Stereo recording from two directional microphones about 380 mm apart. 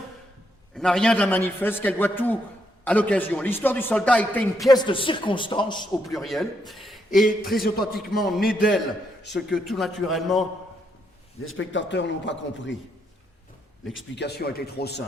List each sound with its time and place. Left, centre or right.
0.7 s a man's voice: centre
6.1 s a man's voice: centre
11.4 s speech: left
13.9 s speech: left